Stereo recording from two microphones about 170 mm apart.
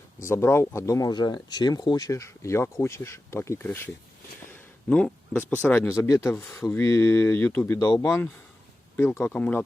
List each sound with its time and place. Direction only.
0.3 s speech: 15° left (ahead or behind)
4.9 s speech: 5° left (ahead or behind)